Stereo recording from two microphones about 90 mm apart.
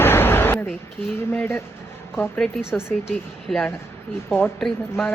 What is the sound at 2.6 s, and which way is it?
Speech, 10° right (ahead or behind).